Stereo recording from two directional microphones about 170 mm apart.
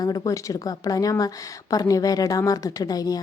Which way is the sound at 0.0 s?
20° left (ahead or behind).